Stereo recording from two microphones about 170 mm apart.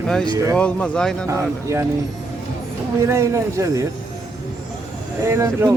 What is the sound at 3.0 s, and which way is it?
Speech, 15° right (ahead or behind).